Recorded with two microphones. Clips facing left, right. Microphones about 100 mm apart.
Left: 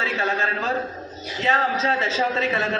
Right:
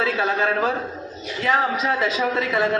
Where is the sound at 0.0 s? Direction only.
5° right (ahead or behind).